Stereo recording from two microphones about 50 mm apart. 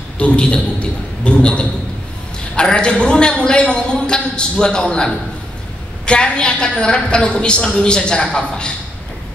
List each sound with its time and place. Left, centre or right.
0.2 s a woman's voice: left
6.0 s a woman's voice: centre